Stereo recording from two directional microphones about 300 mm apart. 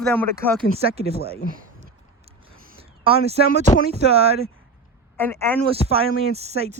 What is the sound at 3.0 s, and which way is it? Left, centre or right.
Speech, centre.